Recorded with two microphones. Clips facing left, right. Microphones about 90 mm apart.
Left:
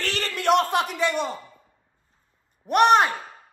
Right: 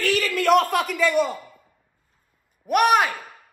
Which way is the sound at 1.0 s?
50° right (ahead or behind).